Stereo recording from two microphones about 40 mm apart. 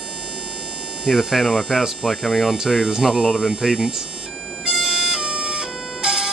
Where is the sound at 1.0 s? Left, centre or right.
Centre.